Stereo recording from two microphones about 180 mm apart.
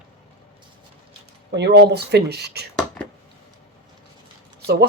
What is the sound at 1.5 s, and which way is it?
A woman's voice, 70° right (ahead or behind).